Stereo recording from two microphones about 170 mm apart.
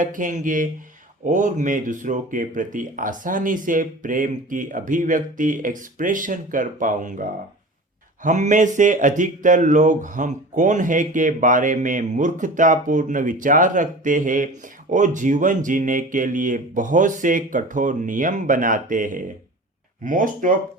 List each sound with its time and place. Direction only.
0.0 s speech: 50° right (ahead or behind)